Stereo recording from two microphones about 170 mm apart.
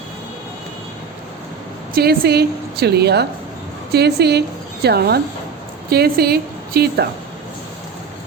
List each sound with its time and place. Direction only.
2.0 s a woman's voice: 65° right (ahead or behind)